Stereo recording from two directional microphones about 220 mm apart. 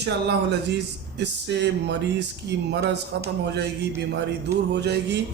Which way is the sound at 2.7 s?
50° right (ahead or behind).